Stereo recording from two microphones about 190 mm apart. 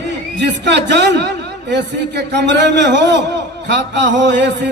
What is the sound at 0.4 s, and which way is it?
A man's voice, 65° right (ahead or behind).